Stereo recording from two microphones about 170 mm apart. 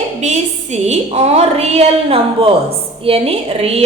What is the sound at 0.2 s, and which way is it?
A woman's voice, 40° right (ahead or behind).